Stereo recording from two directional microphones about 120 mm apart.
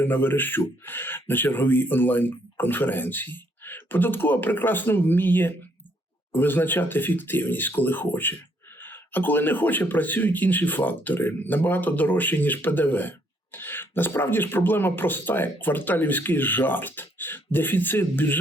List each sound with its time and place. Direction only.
0.0 s speech: 15° left (ahead or behind)